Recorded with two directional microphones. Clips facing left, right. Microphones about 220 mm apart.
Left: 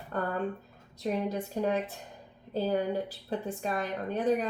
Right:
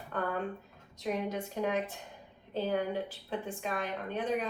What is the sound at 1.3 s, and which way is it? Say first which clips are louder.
A woman's voice: left 3 dB; 35° left (ahead or behind).